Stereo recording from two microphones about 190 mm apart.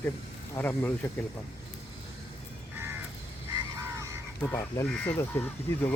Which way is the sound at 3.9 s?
15° right (ahead or behind).